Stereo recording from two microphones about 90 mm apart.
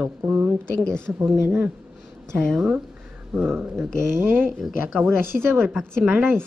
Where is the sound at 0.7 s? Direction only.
10° left (ahead or behind).